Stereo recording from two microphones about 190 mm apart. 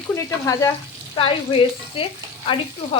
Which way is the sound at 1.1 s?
30° left (ahead or behind).